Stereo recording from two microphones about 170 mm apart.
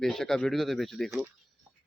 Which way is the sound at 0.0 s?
Centre (ahead or behind).